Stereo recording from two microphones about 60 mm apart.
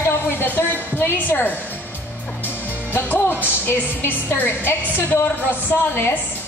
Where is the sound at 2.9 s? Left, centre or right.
Left.